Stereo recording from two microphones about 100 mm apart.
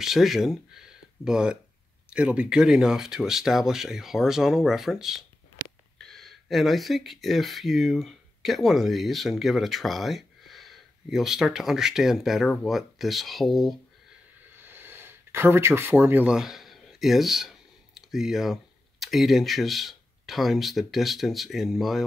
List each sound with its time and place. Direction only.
0.0 s speech: 5° right (ahead or behind)
14.6 s gasp: 20° right (ahead or behind)
16.3 s speech: 5° right (ahead or behind)